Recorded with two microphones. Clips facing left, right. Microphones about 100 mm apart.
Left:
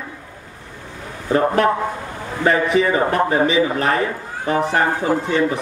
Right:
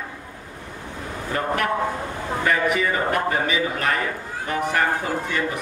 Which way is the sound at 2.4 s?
30° left (ahead or behind).